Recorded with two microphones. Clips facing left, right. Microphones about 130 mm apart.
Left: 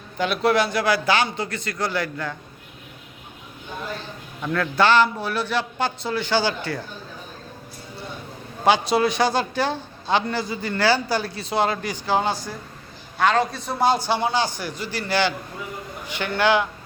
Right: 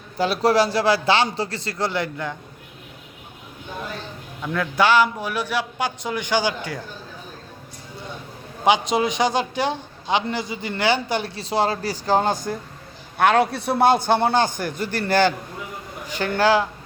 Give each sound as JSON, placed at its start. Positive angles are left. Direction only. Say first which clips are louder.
{"t": 0.2, "sound": "a man's voice", "louder": "right 2 dB", "side_deg": -35}
{"t": 4.5, "sound": "a man's voice", "louder": "even", "side_deg": -10}
{"t": 8.6, "sound": "a man's voice", "louder": "even", "side_deg": -20}
{"t": 13.1, "sound": "a man's voice", "louder": "right 3 dB", "side_deg": -60}
{"t": 16.0, "sound": "a man's voice", "louder": "right 2 dB", "side_deg": -40}